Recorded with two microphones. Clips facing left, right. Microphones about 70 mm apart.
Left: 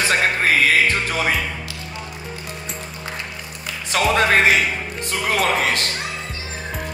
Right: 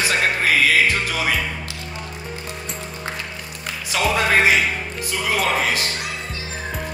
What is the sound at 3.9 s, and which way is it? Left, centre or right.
Music, left.